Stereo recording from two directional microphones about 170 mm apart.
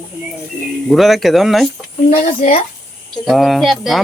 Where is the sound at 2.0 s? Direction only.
45° left (ahead or behind).